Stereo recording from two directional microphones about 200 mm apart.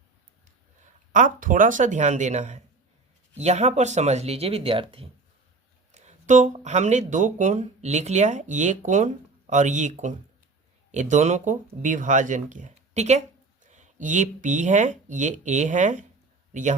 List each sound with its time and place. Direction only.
1.1 s a man's voice: 40° right (ahead or behind)